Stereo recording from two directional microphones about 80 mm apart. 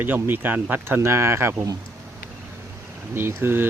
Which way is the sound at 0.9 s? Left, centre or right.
Right.